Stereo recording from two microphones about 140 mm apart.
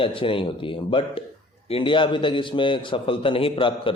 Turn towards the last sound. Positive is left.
turn(degrees=40)  # may be behind; listen again after turning